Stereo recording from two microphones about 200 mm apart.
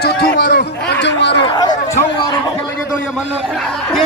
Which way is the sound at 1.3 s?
20° left (ahead or behind).